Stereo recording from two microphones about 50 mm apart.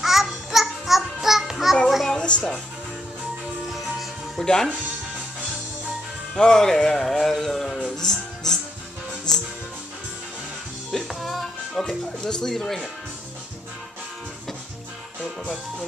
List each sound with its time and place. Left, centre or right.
0.0 s a sound: centre
1.9 s music: centre
2.1 s speech: centre
4.4 s speech: centre
6.3 s speech: centre
10.9 s music: centre
11.8 s speech: centre